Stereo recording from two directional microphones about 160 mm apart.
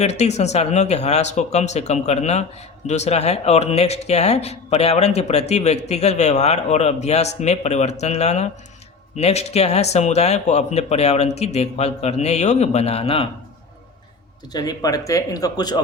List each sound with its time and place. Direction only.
0.0 s speech: 45° left (ahead or behind)
14.5 s speech: 25° left (ahead or behind)